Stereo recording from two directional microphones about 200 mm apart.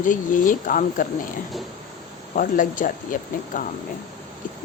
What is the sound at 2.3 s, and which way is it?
Speech, 40° left (ahead or behind).